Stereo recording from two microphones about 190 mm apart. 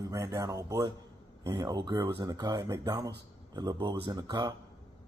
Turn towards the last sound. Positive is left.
turn(degrees=-20)  # may be behind; listen again after turning